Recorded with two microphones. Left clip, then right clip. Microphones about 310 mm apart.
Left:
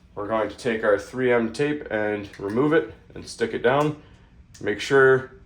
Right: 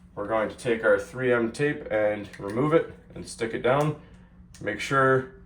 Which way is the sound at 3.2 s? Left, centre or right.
Centre.